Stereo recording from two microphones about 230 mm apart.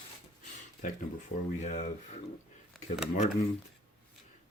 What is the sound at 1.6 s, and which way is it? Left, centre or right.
Speech, left.